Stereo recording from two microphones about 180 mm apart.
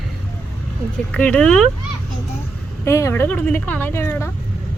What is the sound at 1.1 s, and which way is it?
Child singing, 5° left (ahead or behind).